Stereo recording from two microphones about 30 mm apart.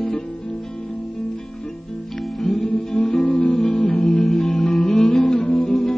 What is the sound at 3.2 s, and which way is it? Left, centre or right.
Music, left.